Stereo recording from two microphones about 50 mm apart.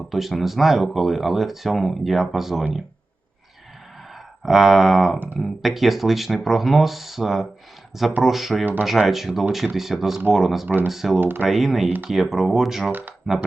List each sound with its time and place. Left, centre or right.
0.1 s speech: centre
4.4 s speech: centre
11.2 s speech: right
11.4 s speech: centre
12.9 s speech: right